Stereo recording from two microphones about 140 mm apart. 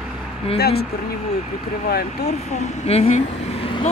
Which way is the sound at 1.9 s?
90° left.